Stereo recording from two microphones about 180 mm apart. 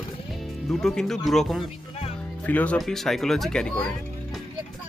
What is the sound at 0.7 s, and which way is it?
Speech, centre (ahead or behind).